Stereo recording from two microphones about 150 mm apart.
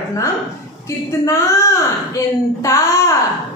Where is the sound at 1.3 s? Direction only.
20° left (ahead or behind).